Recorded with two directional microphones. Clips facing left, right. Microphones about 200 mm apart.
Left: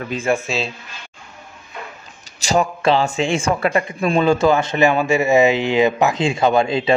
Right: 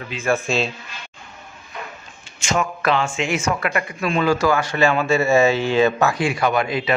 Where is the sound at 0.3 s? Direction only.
20° left (ahead or behind).